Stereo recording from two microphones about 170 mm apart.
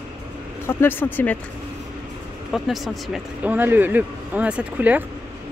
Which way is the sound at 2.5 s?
Centre (ahead or behind).